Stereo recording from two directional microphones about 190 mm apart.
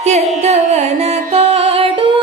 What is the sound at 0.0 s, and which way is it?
Music, 35° right (ahead or behind).